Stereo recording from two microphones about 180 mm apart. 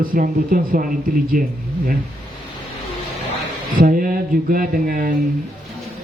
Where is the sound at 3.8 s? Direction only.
50° right (ahead or behind).